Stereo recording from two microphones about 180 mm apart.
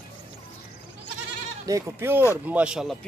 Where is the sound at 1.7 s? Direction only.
15° right (ahead or behind).